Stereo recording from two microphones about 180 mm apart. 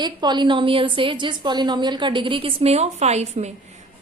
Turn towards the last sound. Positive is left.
turn(degrees=-40)  # may be behind; listen again after turning